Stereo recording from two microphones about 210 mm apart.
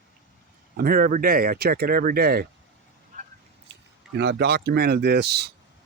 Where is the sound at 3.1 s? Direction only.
35° right (ahead or behind).